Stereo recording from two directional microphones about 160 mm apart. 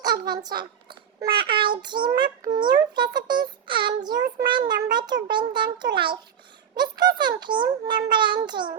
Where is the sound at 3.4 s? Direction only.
30° right (ahead or behind).